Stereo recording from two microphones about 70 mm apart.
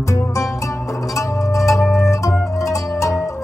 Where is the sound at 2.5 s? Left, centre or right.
Left.